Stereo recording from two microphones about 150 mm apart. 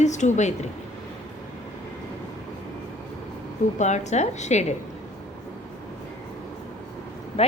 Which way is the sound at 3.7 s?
50° left (ahead or behind).